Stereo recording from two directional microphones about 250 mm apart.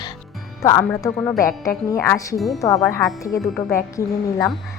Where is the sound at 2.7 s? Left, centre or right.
Centre.